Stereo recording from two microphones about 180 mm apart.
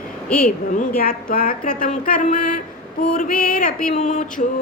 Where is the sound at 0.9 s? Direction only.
55° left (ahead or behind).